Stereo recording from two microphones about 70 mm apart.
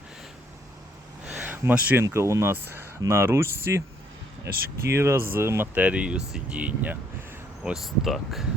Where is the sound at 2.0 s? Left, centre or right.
Right.